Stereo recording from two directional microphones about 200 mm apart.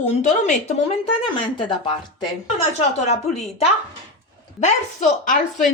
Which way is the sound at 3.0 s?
30° left (ahead or behind).